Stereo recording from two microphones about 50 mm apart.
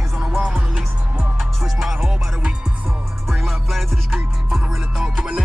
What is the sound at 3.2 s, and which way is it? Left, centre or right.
Music, centre.